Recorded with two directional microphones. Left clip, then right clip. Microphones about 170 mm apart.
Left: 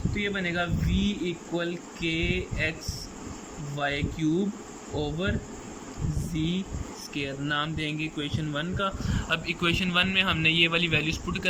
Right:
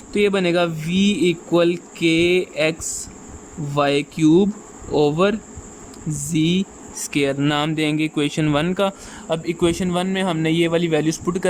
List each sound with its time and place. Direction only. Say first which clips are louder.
0.1 s speech: right 13 dB; 60° right (ahead or behind)
3.8 s speech: right 11 dB; 60° right (ahead or behind)
6.3 s speech: right 12 dB; 65° right (ahead or behind)
9.3 s a man's voice: right 7 dB; 35° right (ahead or behind)